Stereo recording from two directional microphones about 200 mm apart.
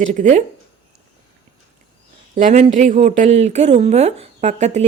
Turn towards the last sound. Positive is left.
turn(degrees=-35)  # may be behind; listen again after turning